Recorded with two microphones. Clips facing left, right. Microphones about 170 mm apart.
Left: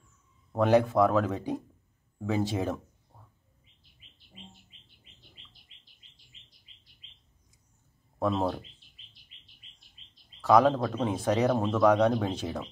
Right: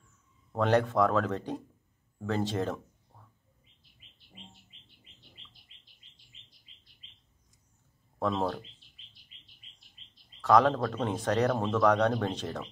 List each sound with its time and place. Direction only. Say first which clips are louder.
0.6 s speech: left 3 dB; 10° left (ahead or behind)
8.2 s speech: left 2 dB; 5° left (ahead or behind)
10.4 s speech: left 2 dB; 5° left (ahead or behind)